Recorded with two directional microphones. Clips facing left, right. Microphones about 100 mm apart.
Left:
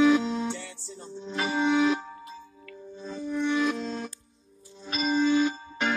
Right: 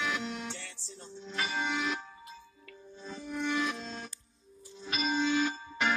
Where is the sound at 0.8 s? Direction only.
90° left.